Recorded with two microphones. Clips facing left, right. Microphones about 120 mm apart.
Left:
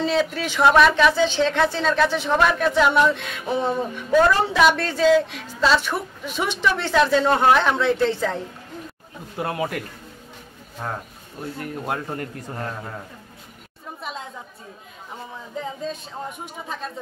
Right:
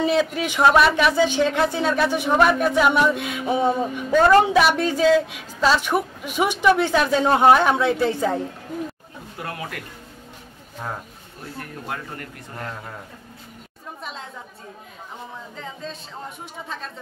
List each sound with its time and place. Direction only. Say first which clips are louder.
0.0 s speech: right 2 dB; 15° right (ahead or behind)
9.4 s speech: left 7 dB; 25° left (ahead or behind)
11.9 s speech: left 4 dB; 25° left (ahead or behind)